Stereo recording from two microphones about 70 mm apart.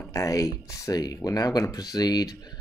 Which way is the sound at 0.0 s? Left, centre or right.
Left.